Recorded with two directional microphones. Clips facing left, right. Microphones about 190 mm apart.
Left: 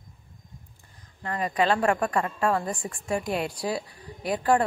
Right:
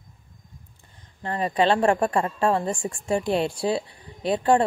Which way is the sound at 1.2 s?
30° right (ahead or behind).